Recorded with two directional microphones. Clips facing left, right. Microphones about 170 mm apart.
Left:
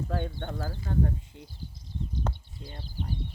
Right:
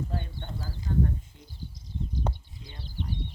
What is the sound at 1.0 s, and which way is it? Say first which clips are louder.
Speech: even; 65° left (ahead or behind).